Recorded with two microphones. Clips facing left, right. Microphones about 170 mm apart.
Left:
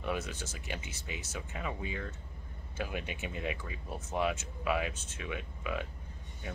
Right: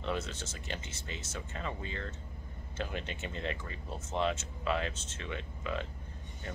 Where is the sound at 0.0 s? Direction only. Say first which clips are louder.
Even; 10° left (ahead or behind).